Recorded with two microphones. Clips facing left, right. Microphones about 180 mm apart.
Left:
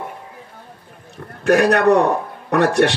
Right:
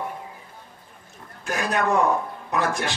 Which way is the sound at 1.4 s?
70° left (ahead or behind).